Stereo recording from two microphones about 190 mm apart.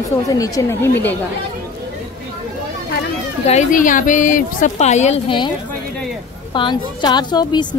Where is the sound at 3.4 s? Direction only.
40° left (ahead or behind).